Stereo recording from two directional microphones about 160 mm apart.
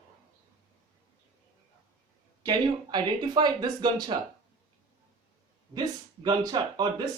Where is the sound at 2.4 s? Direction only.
25° right (ahead or behind).